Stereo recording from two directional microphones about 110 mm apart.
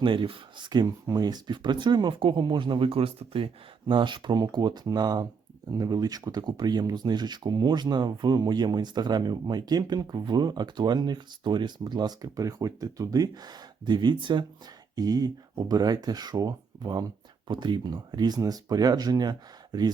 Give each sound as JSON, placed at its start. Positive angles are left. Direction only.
{"t": 0.0, "sound": "speech", "side_deg": -50}